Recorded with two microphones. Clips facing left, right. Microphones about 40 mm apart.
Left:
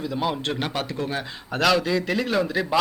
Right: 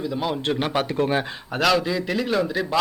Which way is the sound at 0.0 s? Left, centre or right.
Centre.